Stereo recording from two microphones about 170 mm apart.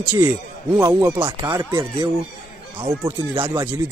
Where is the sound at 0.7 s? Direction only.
15° right (ahead or behind).